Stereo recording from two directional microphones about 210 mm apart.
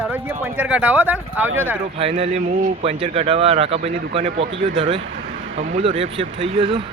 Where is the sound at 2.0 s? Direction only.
30° right (ahead or behind).